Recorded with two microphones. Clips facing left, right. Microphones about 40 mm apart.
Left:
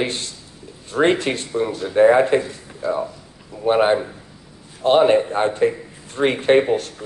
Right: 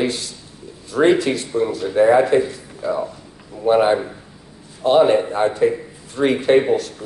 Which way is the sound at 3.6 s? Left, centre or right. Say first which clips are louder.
Right 1 dB; left.